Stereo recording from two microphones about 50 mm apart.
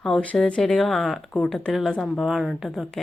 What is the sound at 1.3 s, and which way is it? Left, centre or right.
Speech, centre.